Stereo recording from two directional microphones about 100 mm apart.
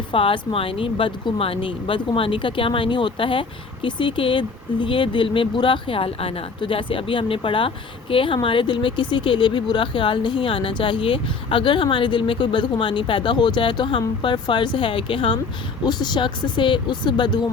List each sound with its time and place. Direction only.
0.1 s speech: 60° left (ahead or behind)
15.8 s speech: 45° left (ahead or behind)